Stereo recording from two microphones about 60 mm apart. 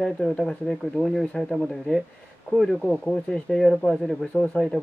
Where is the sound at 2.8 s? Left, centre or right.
Centre.